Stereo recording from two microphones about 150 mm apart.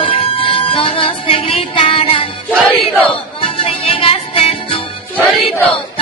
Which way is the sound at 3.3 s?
40° left (ahead or behind).